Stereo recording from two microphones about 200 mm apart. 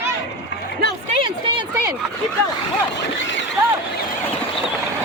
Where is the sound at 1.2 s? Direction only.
25° right (ahead or behind).